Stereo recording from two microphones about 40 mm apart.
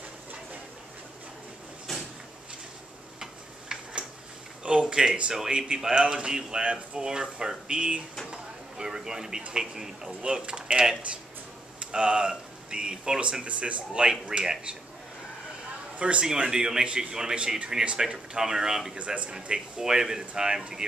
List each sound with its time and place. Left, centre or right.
1.9 s drawer open or close: centre
3.2 s tick-tock: centre
4.6 s speech: right
7.1 s speech: centre
8.3 s a sound: centre
9.5 s speech: centre
10.2 s speech: right
13.2 s speech: right
16.0 s speech: right
18.9 s speech: right
19.8 s speech: centre